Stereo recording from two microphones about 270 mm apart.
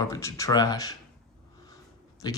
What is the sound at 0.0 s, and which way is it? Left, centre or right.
Speech, centre.